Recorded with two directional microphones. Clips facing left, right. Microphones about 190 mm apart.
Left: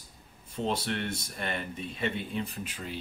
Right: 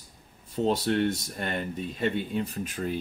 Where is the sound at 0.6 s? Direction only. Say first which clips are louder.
Right 7 dB; 40° right (ahead or behind).